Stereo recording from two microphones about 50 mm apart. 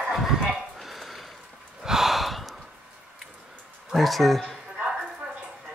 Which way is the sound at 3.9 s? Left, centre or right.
Centre.